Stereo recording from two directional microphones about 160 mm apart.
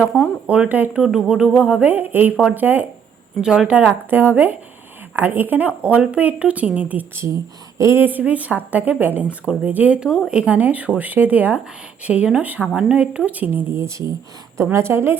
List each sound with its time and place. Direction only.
0.0 s speech: 5° right (ahead or behind)